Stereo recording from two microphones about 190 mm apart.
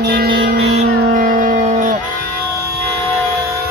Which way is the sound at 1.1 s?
45° right (ahead or behind).